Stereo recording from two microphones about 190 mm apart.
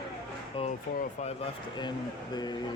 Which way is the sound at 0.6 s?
30° left (ahead or behind).